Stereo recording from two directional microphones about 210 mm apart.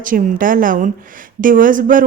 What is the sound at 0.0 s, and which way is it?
Speech, 40° right (ahead or behind).